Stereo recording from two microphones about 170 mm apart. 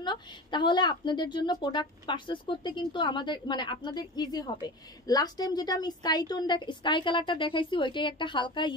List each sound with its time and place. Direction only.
0.0 s a woman's voice: 25° left (ahead or behind)